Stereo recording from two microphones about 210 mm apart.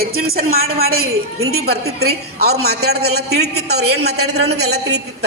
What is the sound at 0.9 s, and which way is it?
Speech, 85° right.